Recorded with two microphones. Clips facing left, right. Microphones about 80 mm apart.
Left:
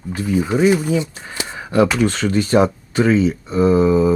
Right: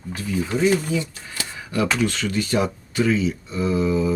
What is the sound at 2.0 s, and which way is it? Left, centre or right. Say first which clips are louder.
Speech: left 6 dB; left.